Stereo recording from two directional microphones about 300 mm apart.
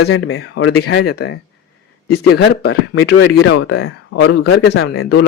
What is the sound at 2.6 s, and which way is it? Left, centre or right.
Speech, left.